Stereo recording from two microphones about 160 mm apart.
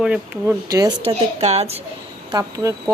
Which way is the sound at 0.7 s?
25° right (ahead or behind).